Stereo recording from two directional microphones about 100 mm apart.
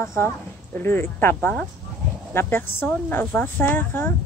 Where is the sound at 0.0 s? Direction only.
30° left (ahead or behind).